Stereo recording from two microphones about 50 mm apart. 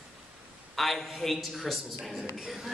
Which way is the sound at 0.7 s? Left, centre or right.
Centre.